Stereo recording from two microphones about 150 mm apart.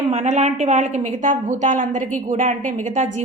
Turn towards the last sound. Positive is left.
turn(degrees=-55)  # may be behind; listen again after turning